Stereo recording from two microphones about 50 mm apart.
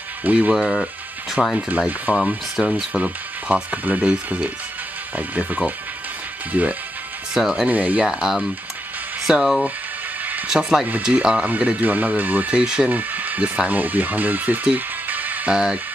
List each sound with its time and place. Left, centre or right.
0.2 s speech: right
0.6 s speech: centre
2.1 s speech: right
2.6 s speech: centre
2.9 s speech: right
7.3 s speech: centre
7.6 s speech: right
8.0 s speech: centre
10.2 s a sound: right
10.5 s speech: centre
11.0 s speech: right
12.6 s speech: right
12.9 s speech: right
15.5 s speech: centre